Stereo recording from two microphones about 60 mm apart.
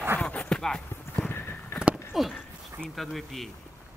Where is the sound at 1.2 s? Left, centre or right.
Left.